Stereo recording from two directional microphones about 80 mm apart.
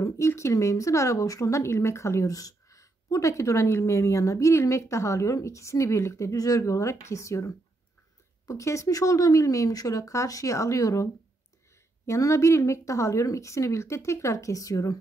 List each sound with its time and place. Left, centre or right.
0.0 s a woman's voice: left
12.1 s a woman's voice: left